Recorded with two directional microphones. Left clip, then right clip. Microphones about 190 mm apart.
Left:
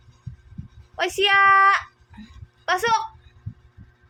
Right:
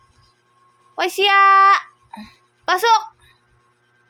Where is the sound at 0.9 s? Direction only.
20° right (ahead or behind).